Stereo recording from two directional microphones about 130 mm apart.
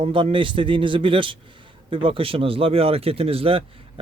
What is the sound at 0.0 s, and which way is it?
Speech, 40° right (ahead or behind).